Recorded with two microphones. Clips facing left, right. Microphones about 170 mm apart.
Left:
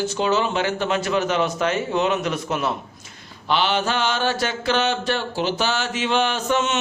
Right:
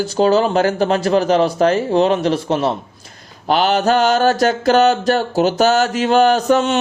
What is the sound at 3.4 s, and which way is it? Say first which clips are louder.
A man's voice: right 7 dB; 40° right (ahead or behind).